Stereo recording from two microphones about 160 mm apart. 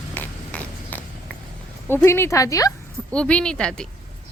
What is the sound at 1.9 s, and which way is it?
Speech, 15° left (ahead or behind).